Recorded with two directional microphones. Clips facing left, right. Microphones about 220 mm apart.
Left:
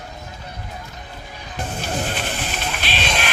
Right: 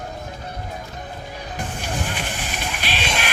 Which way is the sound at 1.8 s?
15° right (ahead or behind).